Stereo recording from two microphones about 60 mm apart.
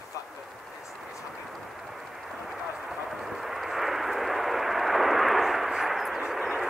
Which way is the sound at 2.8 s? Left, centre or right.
Centre.